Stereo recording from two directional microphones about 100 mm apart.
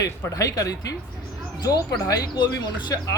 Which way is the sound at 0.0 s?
35° left (ahead or behind).